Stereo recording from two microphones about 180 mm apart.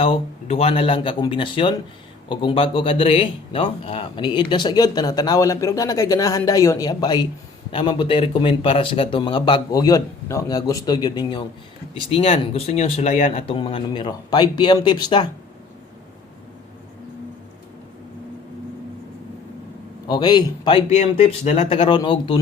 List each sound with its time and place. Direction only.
0.0 s speech: 35° left (ahead or behind)
20.1 s speech: 25° left (ahead or behind)
20.9 s speech: 40° left (ahead or behind)